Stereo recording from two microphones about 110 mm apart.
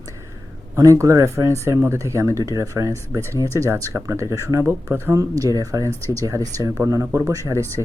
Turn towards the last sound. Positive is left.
turn(degrees=-30)  # may be behind; listen again after turning